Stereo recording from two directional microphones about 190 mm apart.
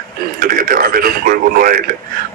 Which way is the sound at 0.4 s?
50° right (ahead or behind).